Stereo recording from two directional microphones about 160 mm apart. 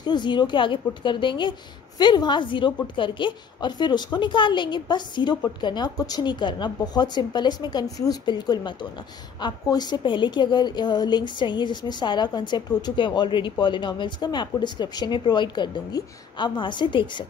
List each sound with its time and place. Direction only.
0.0 s a woman's voice: 30° left (ahead or behind)